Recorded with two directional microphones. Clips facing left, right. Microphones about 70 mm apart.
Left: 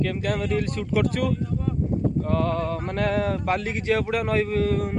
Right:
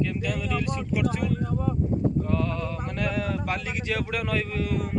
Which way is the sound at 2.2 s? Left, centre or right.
Left.